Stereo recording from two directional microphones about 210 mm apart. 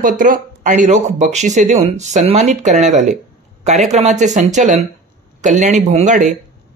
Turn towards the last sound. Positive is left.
turn(degrees=-35)  # may be behind; listen again after turning